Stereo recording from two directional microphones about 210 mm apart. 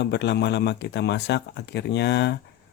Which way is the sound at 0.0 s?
55° left (ahead or behind).